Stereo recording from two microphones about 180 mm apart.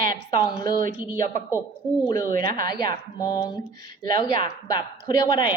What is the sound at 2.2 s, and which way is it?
Speech, 55° right (ahead or behind).